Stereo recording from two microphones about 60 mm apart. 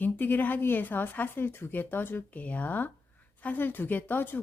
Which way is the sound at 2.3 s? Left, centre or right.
Left.